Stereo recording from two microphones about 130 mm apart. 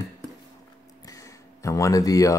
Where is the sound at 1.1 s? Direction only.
25° left (ahead or behind).